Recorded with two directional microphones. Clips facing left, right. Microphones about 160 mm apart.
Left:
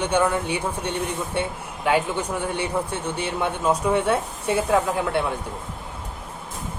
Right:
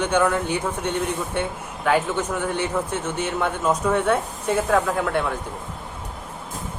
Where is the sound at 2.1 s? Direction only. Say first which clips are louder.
Right 2 dB; 10° left (ahead or behind).